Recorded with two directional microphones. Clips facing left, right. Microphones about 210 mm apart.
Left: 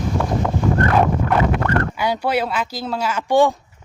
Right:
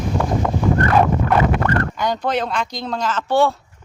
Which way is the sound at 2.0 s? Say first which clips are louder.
Left 1 dB; 10° left (ahead or behind).